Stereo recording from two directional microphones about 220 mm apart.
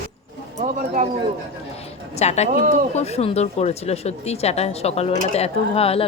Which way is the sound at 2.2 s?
30° left (ahead or behind).